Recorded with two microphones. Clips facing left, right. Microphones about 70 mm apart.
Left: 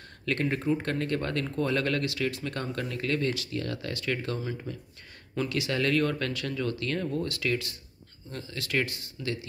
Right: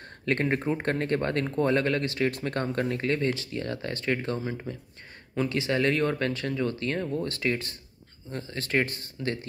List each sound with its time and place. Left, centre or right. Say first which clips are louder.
0.2 s speech: right 3 dB; right